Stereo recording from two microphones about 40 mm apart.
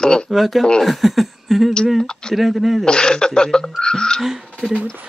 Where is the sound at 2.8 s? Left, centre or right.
Left.